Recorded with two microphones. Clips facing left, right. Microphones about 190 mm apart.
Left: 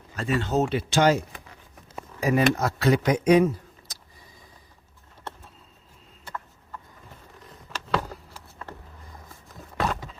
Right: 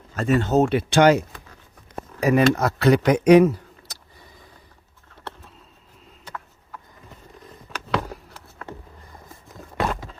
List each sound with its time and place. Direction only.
0.2 s speech: 45° right (ahead or behind); by 1.2 s 65° right (ahead or behind)
2.2 s speech: 65° right (ahead or behind)
9.7 s a sound: centre (ahead or behind)